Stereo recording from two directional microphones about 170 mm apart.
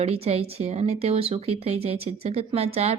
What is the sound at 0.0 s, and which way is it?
A woman's voice, 35° right (ahead or behind).